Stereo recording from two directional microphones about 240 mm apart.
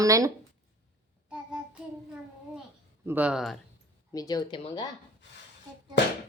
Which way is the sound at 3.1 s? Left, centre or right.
Centre.